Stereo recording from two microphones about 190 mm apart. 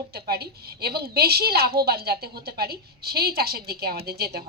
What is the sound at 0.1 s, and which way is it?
A woman's voice, 55° right (ahead or behind).